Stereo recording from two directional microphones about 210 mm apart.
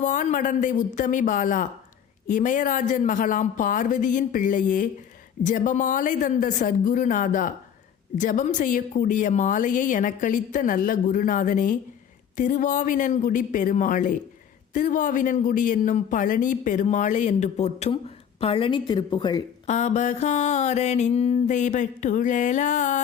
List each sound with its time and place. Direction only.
0.0 s speech: 40° left (ahead or behind); by 19.4 s 20° left (ahead or behind)
19.6 s speech: 35° left (ahead or behind)